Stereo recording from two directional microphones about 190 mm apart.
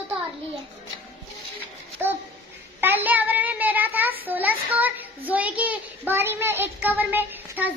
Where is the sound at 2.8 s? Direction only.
10° right (ahead or behind).